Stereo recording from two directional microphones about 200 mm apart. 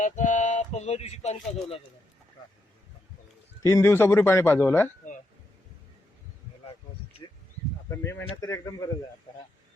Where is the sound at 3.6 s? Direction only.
15° left (ahead or behind).